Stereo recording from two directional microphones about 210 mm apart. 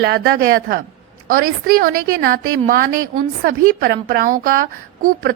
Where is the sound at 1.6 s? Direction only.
45° right (ahead or behind).